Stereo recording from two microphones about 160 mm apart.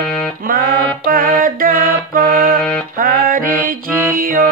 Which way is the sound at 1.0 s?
65° right (ahead or behind).